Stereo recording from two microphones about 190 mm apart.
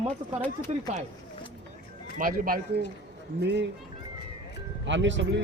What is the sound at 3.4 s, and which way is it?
Speech, 65° right (ahead or behind).